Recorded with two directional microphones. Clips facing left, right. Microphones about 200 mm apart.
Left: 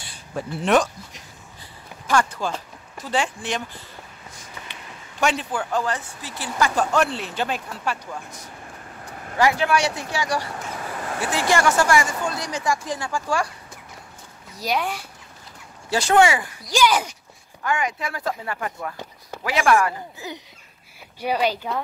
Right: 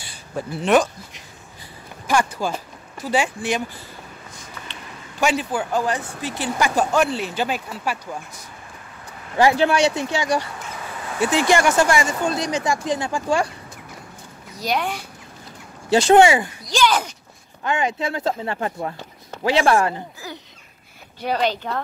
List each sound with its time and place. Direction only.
0.0 s a sound: centre (ahead or behind)
2.0 s speech: 10° right (ahead or behind)
5.2 s speech: 5° right (ahead or behind)
6.7 s speech: 5° right (ahead or behind)
9.4 s speech: 30° right (ahead or behind)
14.6 s speech: 5° left (ahead or behind)
15.9 s speech: 20° right (ahead or behind)
16.6 s speech: 10° left (ahead or behind)
17.6 s speech: 25° right (ahead or behind)
20.2 s a sound: 20° left (ahead or behind)
21.2 s speech: 10° left (ahead or behind)